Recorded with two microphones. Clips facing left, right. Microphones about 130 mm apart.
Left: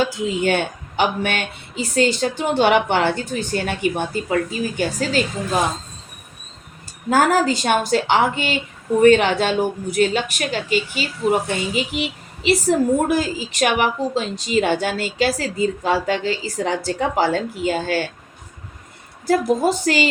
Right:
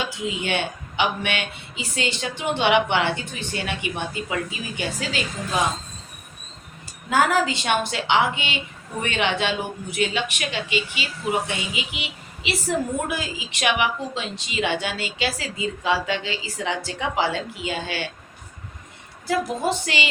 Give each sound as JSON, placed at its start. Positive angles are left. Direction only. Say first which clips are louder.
{"t": 0.0, "sound": "a woman's voice", "louder": "left 8 dB", "side_deg": 40}
{"t": 7.1, "sound": "a woman's voice", "louder": "left 4 dB", "side_deg": 40}
{"t": 19.3, "sound": "a woman's voice", "louder": "left 6 dB", "side_deg": 45}